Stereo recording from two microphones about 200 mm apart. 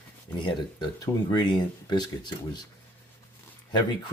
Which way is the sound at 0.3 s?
20° left (ahead or behind).